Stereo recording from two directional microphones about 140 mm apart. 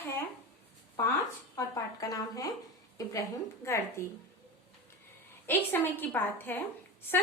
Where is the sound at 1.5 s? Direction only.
25° left (ahead or behind).